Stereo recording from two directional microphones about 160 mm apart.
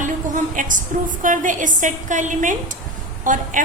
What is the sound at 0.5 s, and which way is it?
A woman's voice, 55° right (ahead or behind).